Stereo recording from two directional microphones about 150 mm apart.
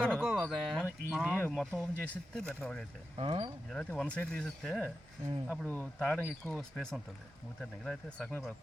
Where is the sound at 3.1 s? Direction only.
40° right (ahead or behind).